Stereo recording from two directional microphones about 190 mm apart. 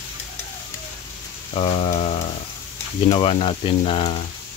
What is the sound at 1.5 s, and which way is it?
Speech, 30° left (ahead or behind).